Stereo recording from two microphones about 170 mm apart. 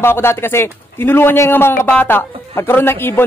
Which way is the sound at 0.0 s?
15° left (ahead or behind).